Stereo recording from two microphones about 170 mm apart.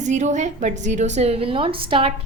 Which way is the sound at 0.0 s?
45° right (ahead or behind).